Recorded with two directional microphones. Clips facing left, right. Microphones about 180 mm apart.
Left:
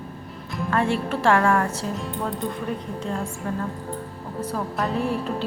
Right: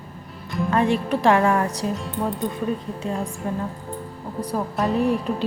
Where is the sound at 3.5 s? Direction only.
15° right (ahead or behind).